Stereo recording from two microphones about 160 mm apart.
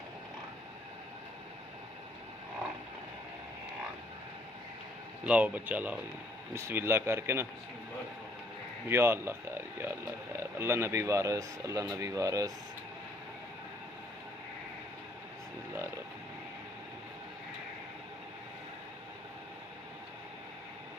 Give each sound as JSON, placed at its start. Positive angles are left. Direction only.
{"t": 5.2, "sound": "speech", "side_deg": -10}
{"t": 8.9, "sound": "speech", "side_deg": -15}